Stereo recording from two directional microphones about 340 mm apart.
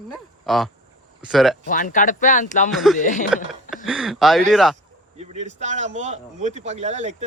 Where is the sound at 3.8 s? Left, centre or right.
Centre.